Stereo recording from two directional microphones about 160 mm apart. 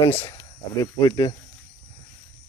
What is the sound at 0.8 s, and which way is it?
Speech, 25° left (ahead or behind).